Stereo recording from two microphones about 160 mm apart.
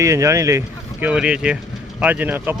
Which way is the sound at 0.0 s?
20° right (ahead or behind).